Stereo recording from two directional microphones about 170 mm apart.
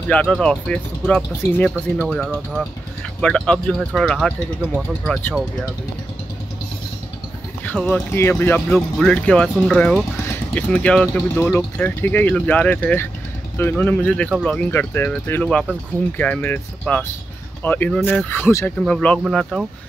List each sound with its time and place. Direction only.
0.1 s speech: 5° left (ahead or behind)
7.6 s speech: 10° left (ahead or behind)
8.5 s speech: 5° left (ahead or behind)